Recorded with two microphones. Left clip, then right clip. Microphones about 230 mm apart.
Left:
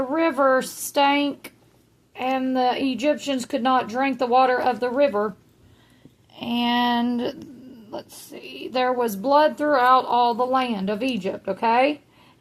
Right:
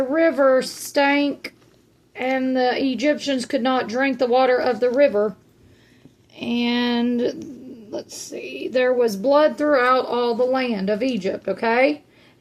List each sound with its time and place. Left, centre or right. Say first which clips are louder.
0.0 s a sound: right 3 dB; left
2.1 s speech: right 2 dB; left
6.4 s speech: left 1 dB; left